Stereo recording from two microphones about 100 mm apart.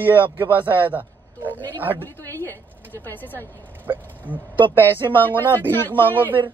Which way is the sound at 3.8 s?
15° right (ahead or behind).